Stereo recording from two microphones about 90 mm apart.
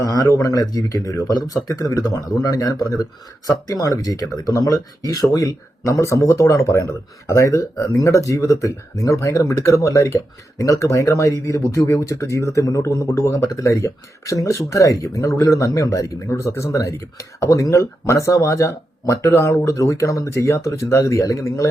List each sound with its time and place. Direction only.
0.3 s speech: 40° left (ahead or behind)